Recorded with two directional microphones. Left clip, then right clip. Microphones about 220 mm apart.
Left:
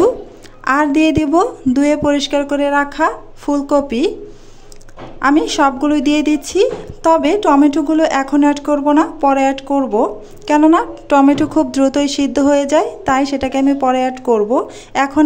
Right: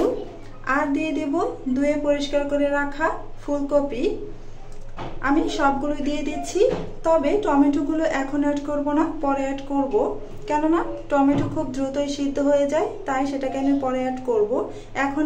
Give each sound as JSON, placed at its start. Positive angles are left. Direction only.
{"t": 0.7, "sound": "a woman's voice", "side_deg": 50}
{"t": 5.2, "sound": "a woman's voice", "side_deg": 50}